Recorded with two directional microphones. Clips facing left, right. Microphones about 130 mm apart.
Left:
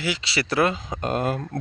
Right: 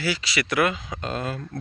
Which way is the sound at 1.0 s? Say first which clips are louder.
Left 5 dB; 50° left (ahead or behind).